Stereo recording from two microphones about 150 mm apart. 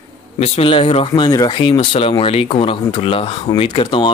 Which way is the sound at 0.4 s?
40° left (ahead or behind).